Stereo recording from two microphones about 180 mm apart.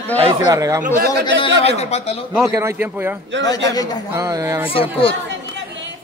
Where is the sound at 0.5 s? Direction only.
15° right (ahead or behind).